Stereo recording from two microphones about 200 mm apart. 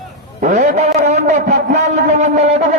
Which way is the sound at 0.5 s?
35° right (ahead or behind).